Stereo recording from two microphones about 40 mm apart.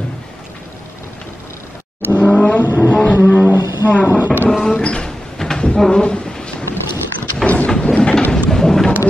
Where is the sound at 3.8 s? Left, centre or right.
Right.